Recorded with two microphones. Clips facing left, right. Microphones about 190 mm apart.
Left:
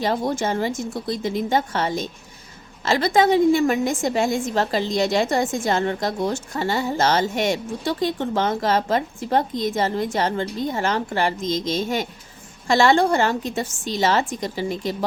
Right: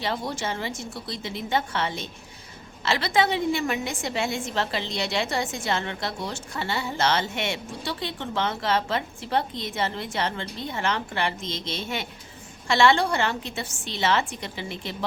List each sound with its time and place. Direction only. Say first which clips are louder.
0.0 s a woman's voice: left 7 dB; 45° left (ahead or behind)